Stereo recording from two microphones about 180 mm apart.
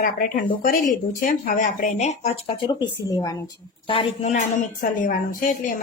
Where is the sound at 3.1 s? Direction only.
20° left (ahead or behind).